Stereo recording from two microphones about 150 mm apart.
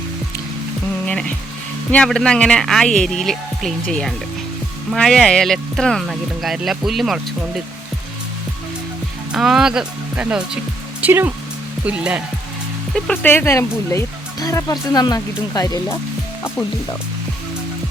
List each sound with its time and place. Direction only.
1.0 s speech: 5° left (ahead or behind)
9.3 s speech: 5° right (ahead or behind)
13.2 s speech: 15° left (ahead or behind)